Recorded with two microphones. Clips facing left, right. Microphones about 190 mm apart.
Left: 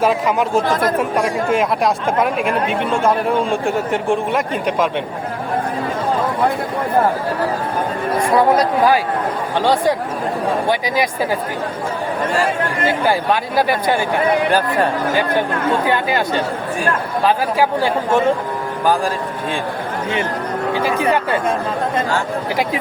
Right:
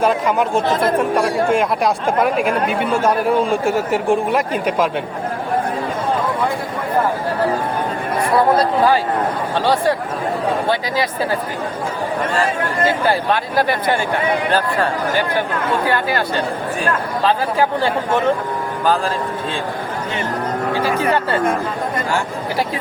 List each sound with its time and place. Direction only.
0.0 s speech: centre (ahead or behind)
0.7 s speech: 25° right (ahead or behind)
0.9 s speech: centre (ahead or behind)
8.5 s speech: 10° left (ahead or behind)
13.1 s speech: 10° left (ahead or behind)